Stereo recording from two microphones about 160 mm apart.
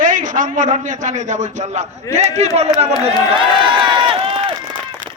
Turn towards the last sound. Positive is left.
turn(degrees=-35)  # may be behind; listen again after turning